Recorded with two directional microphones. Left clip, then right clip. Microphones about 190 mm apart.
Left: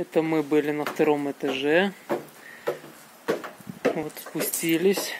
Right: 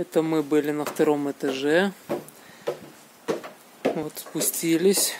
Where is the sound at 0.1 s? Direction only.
15° right (ahead or behind).